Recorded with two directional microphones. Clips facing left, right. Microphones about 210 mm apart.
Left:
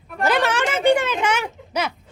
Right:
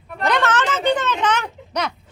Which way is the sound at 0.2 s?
5° left (ahead or behind).